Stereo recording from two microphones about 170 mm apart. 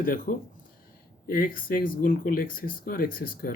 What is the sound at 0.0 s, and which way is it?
Speech, 55° left (ahead or behind).